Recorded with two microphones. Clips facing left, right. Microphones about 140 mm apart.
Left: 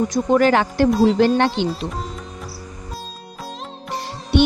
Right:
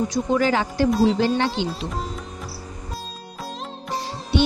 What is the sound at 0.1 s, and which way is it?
Speech, 60° left (ahead or behind).